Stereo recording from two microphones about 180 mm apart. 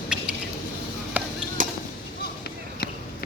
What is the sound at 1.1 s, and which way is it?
Chop, 10° right (ahead or behind).